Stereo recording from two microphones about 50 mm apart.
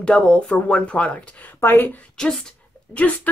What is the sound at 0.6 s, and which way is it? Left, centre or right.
Speech, left.